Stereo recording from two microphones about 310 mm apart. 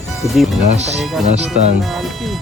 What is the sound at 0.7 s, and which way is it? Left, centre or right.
Speech, right.